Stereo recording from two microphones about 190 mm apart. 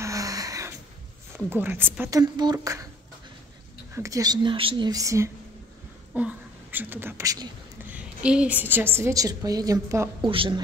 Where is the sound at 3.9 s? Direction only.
15° right (ahead or behind).